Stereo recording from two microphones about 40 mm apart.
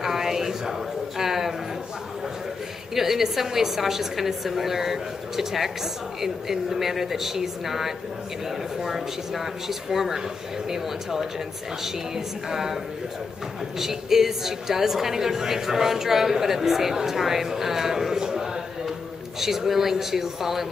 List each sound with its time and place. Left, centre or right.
0.0 s a sound: centre
2.9 s a woman's voice: centre
12.4 s a woman's voice: centre
13.7 s a woman's voice: centre
18.2 s a sound: centre
19.4 s a woman's voice: centre